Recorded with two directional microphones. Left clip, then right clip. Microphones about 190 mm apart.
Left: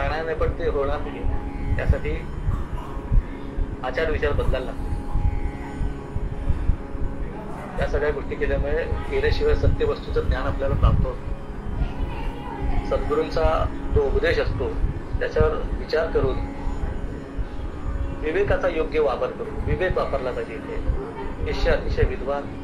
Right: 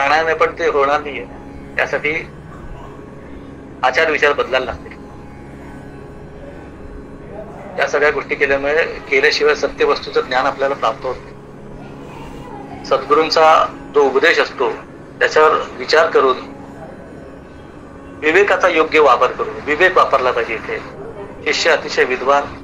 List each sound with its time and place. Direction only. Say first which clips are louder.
0.0 s a man's voice: right 12 dB; 35° right (ahead or behind)
3.8 s a man's voice: right 11 dB; 35° right (ahead or behind)
7.8 s a man's voice: right 10 dB; 35° right (ahead or behind)
12.8 s a man's voice: right 10 dB; 35° right (ahead or behind)
18.2 s a man's voice: right 10 dB; 35° right (ahead or behind)